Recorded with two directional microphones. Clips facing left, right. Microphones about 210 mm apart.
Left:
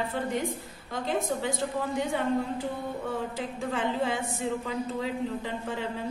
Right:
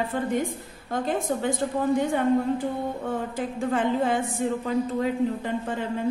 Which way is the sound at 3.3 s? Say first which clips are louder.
Right 6 dB; 50° right (ahead or behind).